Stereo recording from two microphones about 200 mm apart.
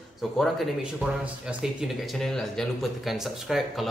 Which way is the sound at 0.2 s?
Centre (ahead or behind).